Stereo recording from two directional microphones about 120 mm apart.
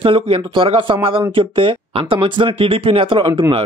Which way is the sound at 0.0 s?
50° right (ahead or behind).